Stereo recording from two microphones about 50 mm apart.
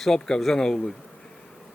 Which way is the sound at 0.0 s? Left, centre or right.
Centre.